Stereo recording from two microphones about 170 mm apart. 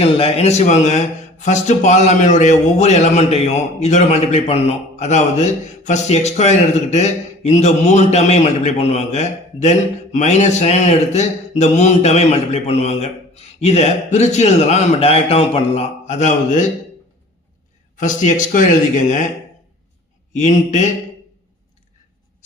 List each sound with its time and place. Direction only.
0.0 s a man's voice: 35° left (ahead or behind)
17.9 s speech: 50° left (ahead or behind)
20.3 s speech: 45° left (ahead or behind)